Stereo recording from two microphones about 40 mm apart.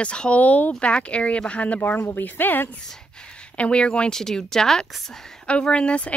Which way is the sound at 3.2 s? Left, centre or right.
Left.